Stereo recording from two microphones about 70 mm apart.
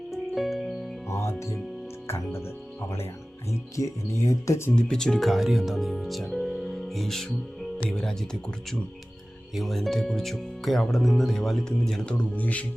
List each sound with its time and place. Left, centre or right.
0.1 s music: centre
1.0 s music: left
2.0 s speech: left
3.8 s speech: left
4.7 s speech: centre
12.1 s speech: left